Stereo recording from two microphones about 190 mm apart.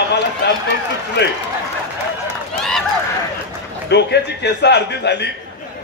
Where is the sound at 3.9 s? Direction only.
65° left (ahead or behind).